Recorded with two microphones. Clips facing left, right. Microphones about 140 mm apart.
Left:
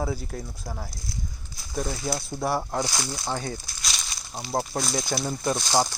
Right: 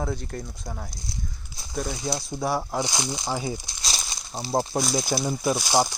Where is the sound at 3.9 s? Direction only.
25° right (ahead or behind).